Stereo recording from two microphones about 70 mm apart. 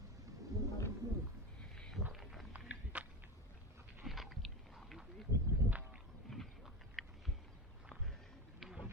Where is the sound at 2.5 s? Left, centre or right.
Centre.